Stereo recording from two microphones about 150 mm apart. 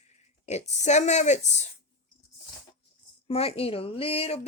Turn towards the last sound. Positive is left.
turn(degrees=40)  # may be behind; listen again after turning